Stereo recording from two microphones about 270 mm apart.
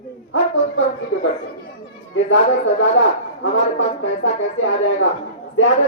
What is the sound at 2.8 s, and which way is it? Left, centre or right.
A man's voice, left.